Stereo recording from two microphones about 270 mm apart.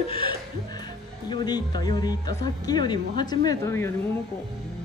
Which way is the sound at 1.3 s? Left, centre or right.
Centre.